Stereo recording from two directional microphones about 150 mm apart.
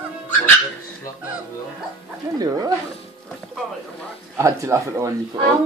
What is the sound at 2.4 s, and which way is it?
Dog, 25° right (ahead or behind).